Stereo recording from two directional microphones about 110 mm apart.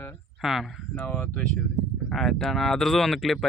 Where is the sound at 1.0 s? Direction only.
15° left (ahead or behind).